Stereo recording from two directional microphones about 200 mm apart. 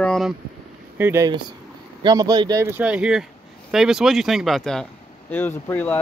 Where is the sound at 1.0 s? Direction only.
15° right (ahead or behind).